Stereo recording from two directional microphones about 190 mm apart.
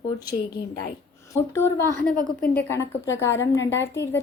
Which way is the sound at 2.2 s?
50° left (ahead or behind).